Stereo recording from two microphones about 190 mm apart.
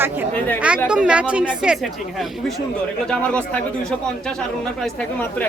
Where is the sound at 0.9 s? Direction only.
5° right (ahead or behind).